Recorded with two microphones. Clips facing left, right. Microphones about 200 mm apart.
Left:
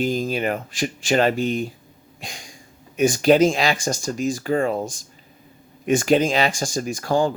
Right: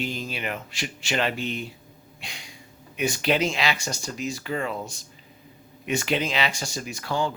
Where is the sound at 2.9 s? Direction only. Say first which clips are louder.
Left 9 dB; 45° left (ahead or behind).